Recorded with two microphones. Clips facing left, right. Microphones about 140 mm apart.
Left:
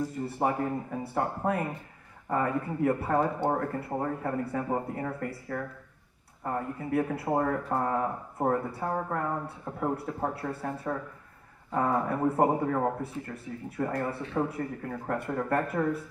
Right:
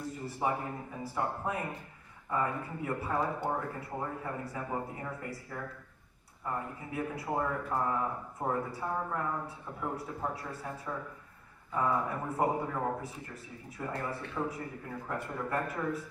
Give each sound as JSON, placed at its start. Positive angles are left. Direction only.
{"t": 0.4, "sound": "speech", "side_deg": 55}